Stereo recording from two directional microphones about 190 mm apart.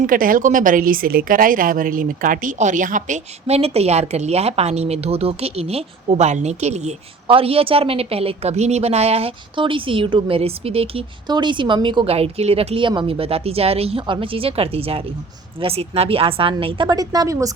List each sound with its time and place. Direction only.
0.0 s a woman's voice: 45° right (ahead or behind); by 17.5 s 15° right (ahead or behind)